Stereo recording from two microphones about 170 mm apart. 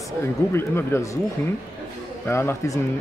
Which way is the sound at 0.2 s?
15° left (ahead or behind).